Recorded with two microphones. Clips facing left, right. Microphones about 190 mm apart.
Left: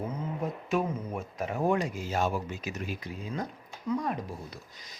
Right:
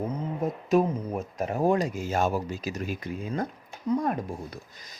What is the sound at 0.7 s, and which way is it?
Speech, 40° right (ahead or behind).